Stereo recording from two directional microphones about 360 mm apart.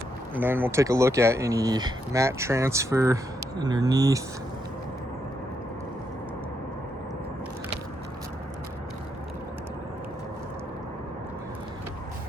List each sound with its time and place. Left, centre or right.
0.3 s speech: centre